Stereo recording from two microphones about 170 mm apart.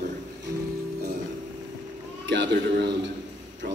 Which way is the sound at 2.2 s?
90° right.